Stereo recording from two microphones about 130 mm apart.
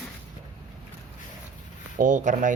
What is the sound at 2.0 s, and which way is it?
Speech, 75° right (ahead or behind).